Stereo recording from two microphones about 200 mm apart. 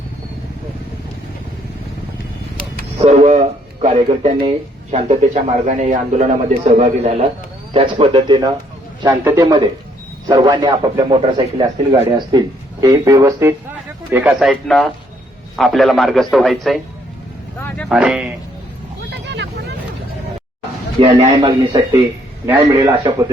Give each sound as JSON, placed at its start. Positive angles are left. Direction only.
{"t": 3.0, "sound": "a man's voice", "side_deg": -30}
{"t": 17.8, "sound": "speech", "side_deg": -5}
{"t": 19.1, "sound": "vehicle", "side_deg": -60}
{"t": 21.2, "sound": "a man's voice", "side_deg": -30}
{"t": 22.8, "sound": "a man's voice", "side_deg": -25}